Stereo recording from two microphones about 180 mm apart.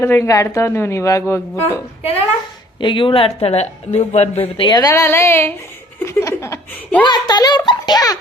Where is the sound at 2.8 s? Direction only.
25° left (ahead or behind).